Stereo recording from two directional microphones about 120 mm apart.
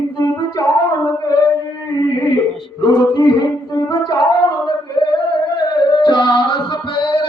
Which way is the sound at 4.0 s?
40° left (ahead or behind).